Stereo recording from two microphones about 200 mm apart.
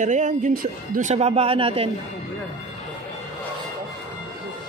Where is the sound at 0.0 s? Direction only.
40° right (ahead or behind).